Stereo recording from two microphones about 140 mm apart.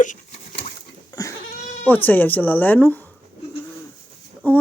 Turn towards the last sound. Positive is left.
turn(degrees=15)  # may be behind; listen again after turning